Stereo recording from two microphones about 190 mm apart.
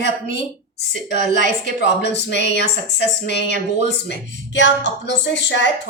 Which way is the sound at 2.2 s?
65° left (ahead or behind).